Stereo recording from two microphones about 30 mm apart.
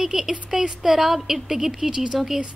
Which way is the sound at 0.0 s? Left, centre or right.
Centre.